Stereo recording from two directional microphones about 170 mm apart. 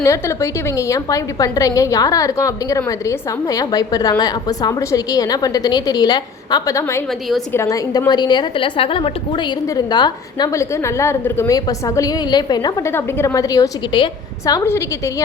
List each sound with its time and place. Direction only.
0.0 s a woman's voice: 15° left (ahead or behind)